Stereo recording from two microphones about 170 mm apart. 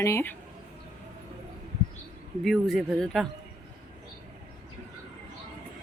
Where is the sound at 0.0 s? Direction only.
15° left (ahead or behind).